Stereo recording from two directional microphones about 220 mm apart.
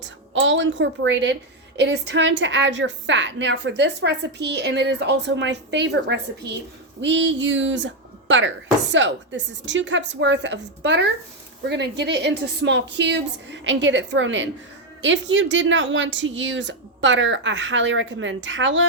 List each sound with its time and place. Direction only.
0.0 s a woman's voice: 55° right (ahead or behind)